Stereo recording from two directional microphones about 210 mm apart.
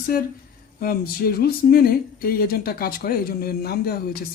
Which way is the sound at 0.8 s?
45° left (ahead or behind).